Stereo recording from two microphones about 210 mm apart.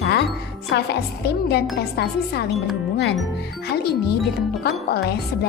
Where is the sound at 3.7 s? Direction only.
50° left (ahead or behind).